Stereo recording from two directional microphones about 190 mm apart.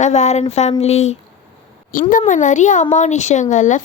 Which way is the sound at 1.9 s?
45° left (ahead or behind).